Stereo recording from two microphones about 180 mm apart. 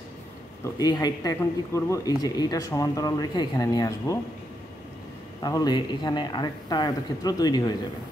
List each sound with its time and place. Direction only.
0.7 s speech: 20° left (ahead or behind)
5.4 s speech: 20° left (ahead or behind)